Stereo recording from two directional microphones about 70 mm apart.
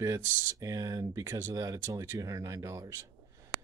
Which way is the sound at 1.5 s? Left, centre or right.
Right.